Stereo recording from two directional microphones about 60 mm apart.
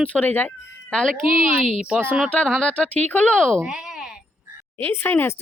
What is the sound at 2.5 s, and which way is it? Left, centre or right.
Speech, centre.